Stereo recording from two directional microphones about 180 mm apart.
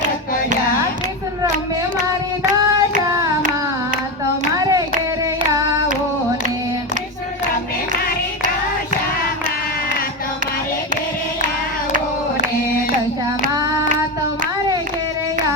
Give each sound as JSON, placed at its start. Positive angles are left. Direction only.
{"t": 3.1, "sound": "child singing", "side_deg": -20}
{"t": 4.5, "sound": "hands", "side_deg": -20}